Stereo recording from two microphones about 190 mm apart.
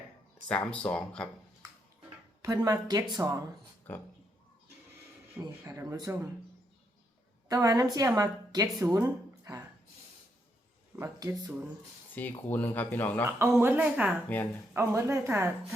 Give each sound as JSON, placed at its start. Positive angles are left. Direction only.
{"t": 0.4, "sound": "speech", "side_deg": 5}
{"t": 2.4, "sound": "a woman's voice", "side_deg": -15}
{"t": 3.9, "sound": "speech", "side_deg": 10}
{"t": 5.4, "sound": "a woman's voice", "side_deg": -15}
{"t": 7.4, "sound": "a woman's voice", "side_deg": -20}
{"t": 10.9, "sound": "a woman's voice", "side_deg": -15}
{"t": 12.1, "sound": "speech", "side_deg": 10}
{"t": 13.5, "sound": "a woman's voice", "side_deg": -10}